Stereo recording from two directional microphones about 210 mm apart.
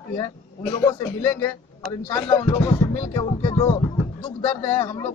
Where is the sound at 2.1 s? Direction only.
15° left (ahead or behind).